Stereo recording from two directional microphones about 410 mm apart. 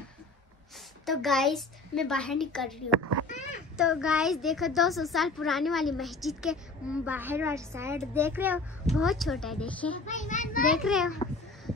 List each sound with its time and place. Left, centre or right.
1.0 s a woman's voice: centre
3.0 s a child's voice: right
3.7 s a woman's voice: centre
10.0 s a child's voice: centre
10.7 s a woman's voice: centre